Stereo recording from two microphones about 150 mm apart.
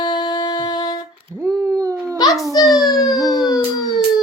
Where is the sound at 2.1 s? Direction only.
25° left (ahead or behind).